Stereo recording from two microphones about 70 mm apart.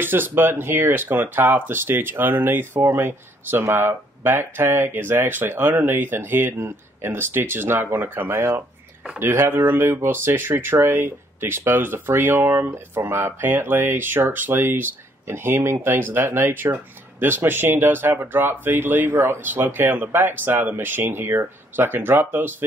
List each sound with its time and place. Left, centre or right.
0.0 s speech: right